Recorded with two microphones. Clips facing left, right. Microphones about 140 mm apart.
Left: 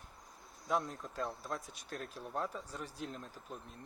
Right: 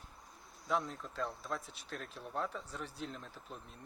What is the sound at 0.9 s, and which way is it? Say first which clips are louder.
Speech: even; 45° left (ahead or behind).